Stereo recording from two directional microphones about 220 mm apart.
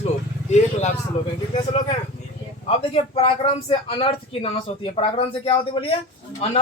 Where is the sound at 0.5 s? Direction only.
30° left (ahead or behind).